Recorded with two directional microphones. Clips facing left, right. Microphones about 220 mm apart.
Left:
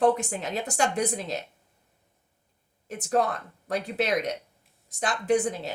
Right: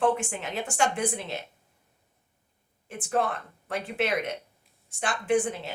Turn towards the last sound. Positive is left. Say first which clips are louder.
# left 1 dB
turn(degrees=40)  # may be behind; listen again after turning